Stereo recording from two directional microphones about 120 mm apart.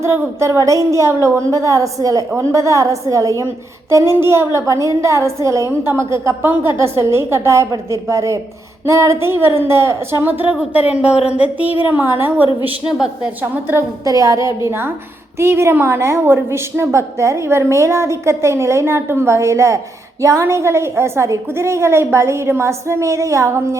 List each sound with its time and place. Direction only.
0.0 s a woman's voice: 25° right (ahead or behind)
13.4 s a woman's voice: 20° right (ahead or behind)